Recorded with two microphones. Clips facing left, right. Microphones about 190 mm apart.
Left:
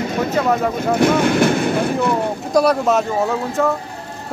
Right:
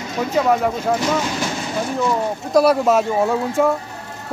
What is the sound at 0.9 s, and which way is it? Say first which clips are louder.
Speech: left 6 dB; 60° left (ahead or behind).